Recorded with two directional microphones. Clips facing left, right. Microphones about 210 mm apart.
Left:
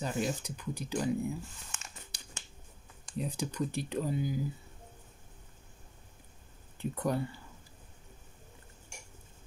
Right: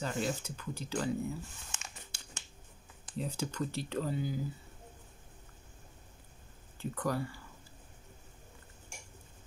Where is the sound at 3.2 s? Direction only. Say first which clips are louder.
Left 2 dB; 15° left (ahead or behind).